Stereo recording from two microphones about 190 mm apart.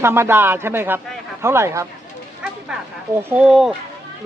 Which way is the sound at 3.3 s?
5° right (ahead or behind).